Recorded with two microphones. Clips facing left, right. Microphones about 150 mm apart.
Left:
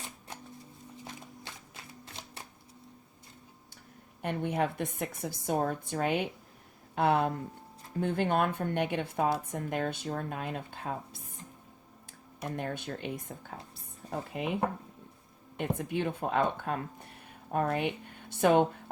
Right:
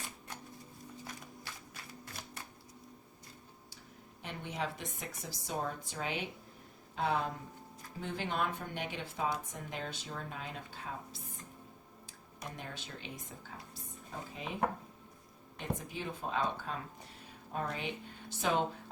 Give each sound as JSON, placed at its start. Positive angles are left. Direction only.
{"t": 1.0, "sound": "music", "side_deg": 25}
{"t": 4.2, "sound": "speech", "side_deg": 55}
{"t": 12.5, "sound": "speech", "side_deg": 55}
{"t": 15.5, "sound": "speech", "side_deg": 60}